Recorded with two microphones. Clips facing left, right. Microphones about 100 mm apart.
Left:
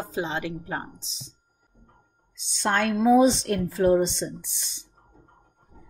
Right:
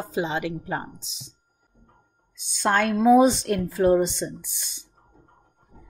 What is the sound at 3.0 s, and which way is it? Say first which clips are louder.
Speech: right 2 dB; 50° right (ahead or behind).